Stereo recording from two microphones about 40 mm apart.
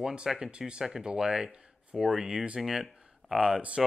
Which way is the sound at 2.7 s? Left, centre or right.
Centre.